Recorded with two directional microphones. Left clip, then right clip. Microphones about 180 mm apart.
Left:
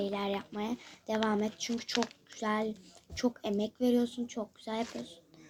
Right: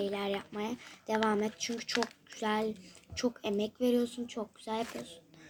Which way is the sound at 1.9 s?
20° left (ahead or behind).